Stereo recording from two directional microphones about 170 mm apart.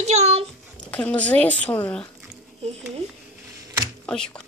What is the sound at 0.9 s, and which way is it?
Speech, 5° left (ahead or behind).